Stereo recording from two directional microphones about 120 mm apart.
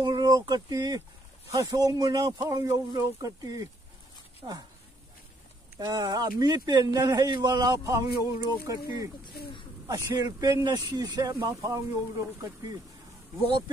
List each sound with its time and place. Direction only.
0.0 s speech: 35° right (ahead or behind)
5.8 s speech: 35° right (ahead or behind)
9.2 s speech: 45° left (ahead or behind)
9.8 s speech: 30° right (ahead or behind)
13.4 s speech: 40° right (ahead or behind)